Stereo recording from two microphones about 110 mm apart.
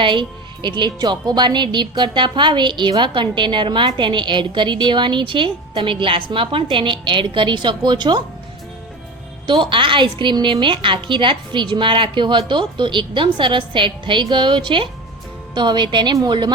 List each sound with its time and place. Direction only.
0.0 s a woman's voice: 45° right (ahead or behind)
9.5 s a woman's voice: 50° right (ahead or behind)